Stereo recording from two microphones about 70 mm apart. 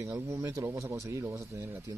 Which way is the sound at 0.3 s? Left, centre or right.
Right.